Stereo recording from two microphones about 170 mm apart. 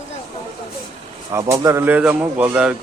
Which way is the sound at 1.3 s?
15° right (ahead or behind).